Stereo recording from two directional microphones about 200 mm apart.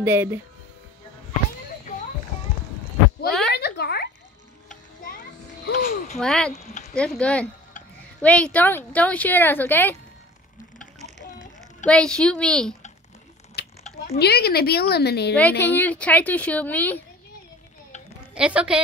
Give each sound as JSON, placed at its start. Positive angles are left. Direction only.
{"t": 0.0, "sound": "speech", "side_deg": -10}
{"t": 3.3, "sound": "a sound", "side_deg": 0}
{"t": 3.5, "sound": "a sound", "side_deg": 55}
{"t": 5.7, "sound": "speech", "side_deg": 45}
{"t": 6.1, "sound": "a woman's voice", "side_deg": 5}
{"t": 6.5, "sound": "speech", "side_deg": 35}
{"t": 6.9, "sound": "a woman's voice", "side_deg": 5}
{"t": 11.8, "sound": "a woman's voice", "side_deg": 5}
{"t": 13.6, "sound": "speech", "side_deg": 50}
{"t": 15.6, "sound": "speech", "side_deg": 10}
{"t": 18.3, "sound": "a woman's voice", "side_deg": -5}